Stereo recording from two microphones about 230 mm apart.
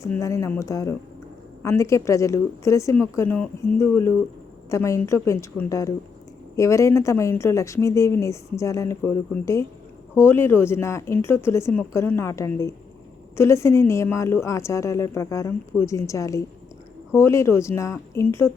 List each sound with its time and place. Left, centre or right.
0.0 s speech: centre
4.7 s speech: centre